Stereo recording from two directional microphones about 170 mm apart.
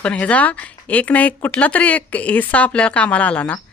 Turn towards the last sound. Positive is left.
turn(degrees=10)  # may be behind; listen again after turning